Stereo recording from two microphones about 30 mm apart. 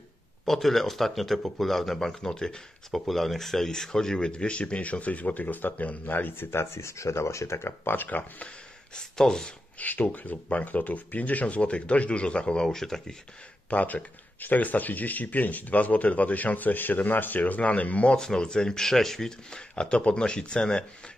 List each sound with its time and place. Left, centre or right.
0.5 s a man's voice: centre
2.0 s speech: left
2.9 s a man's voice: centre
4.2 s speech: left
8.0 s speech: left
8.9 s speech: left
9.8 s speech: left
11.4 s speech: left
12.6 s a man's voice: centre
13.7 s speech: left
14.4 s speech: left
17.6 s speech: left
18.1 s a man's voice: left
19.7 s speech: left